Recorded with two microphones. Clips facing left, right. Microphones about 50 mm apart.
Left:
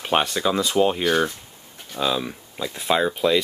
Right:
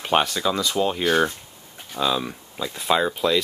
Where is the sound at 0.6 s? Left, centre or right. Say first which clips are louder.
Left 5 dB; left.